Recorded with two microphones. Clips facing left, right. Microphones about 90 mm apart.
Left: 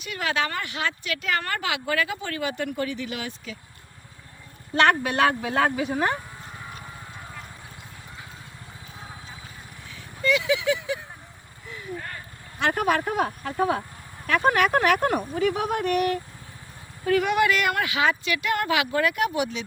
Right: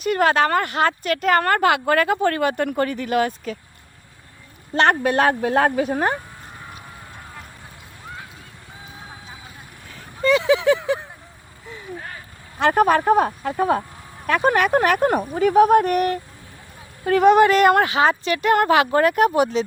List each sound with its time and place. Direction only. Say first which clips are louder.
0.0 s speech: right 10 dB; 45° right (ahead or behind)
4.7 s speech: right 3 dB; 40° right (ahead or behind)
9.9 s a sound: right 6 dB; 45° right (ahead or behind)
12.5 s speech: right 7 dB; 40° right (ahead or behind)